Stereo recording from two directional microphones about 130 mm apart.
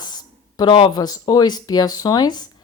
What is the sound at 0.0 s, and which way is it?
A woman's voice, 30° left (ahead or behind).